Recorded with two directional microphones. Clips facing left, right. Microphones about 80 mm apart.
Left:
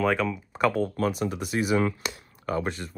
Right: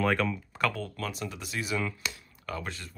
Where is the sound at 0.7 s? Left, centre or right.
Left.